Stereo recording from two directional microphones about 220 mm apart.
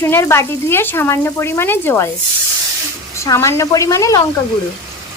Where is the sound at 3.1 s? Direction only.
15° left (ahead or behind).